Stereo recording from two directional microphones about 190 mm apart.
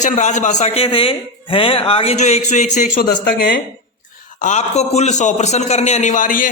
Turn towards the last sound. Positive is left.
turn(degrees=45)  # may be behind; listen again after turning